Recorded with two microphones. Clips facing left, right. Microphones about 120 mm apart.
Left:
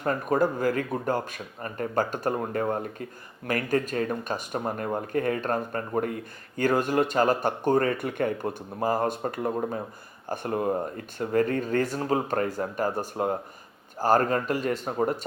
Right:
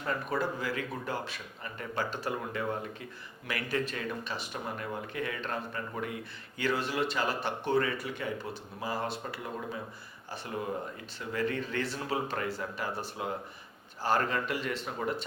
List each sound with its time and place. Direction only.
0.0 s speech: 45° left (ahead or behind)